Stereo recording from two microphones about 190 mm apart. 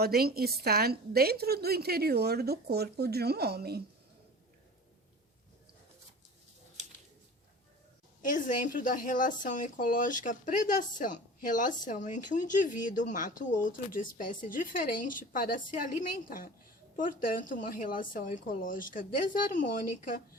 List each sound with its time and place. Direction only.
0.0 s a woman's voice: 55° right (ahead or behind)
8.2 s speech: 45° left (ahead or behind)